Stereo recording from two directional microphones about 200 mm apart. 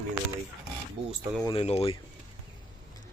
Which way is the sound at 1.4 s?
25° left (ahead or behind).